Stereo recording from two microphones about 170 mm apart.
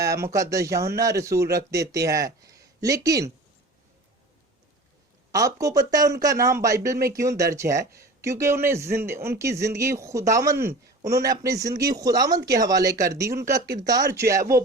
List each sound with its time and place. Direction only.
0.0 s speech: 20° right (ahead or behind)
5.3 s speech: 20° right (ahead or behind)